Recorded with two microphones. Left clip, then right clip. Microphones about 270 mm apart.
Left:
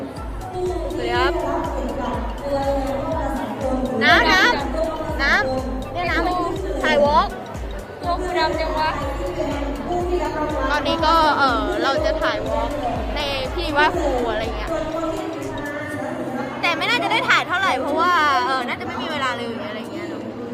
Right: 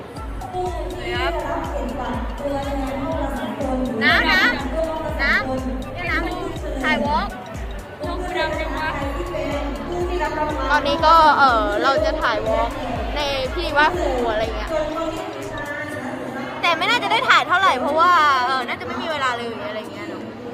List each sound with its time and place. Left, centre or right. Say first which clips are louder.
4.0 s music: left 2 dB; left
6.8 s music: left 4 dB; left
10.5 s a woman's voice: right 2 dB; centre
16.6 s speech: right 2 dB; centre